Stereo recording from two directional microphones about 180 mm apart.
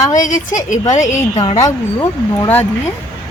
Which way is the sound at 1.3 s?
30° left (ahead or behind).